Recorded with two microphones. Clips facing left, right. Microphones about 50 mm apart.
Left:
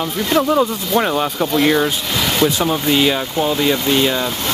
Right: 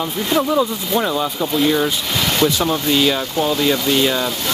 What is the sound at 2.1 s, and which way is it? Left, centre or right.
Speech, centre.